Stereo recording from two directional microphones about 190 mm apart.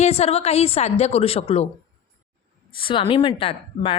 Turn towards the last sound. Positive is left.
turn(degrees=30)  # may be behind; listen again after turning